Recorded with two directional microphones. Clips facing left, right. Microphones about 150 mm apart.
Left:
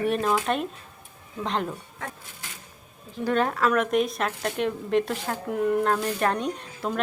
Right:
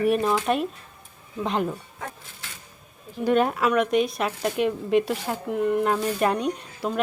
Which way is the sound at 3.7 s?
Centre (ahead or behind).